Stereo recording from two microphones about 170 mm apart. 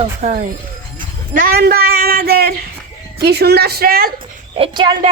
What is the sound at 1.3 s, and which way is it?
Speech, 60° right (ahead or behind).